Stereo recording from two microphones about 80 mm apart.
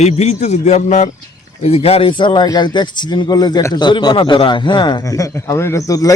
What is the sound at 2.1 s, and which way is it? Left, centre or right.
A man's voice, left.